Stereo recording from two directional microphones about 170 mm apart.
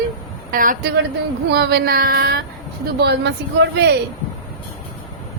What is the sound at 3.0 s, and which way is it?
Speech, 80° right.